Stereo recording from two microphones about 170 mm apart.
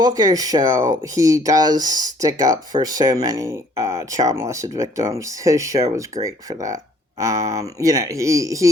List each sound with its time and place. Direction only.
0.0 s speech: 20° right (ahead or behind)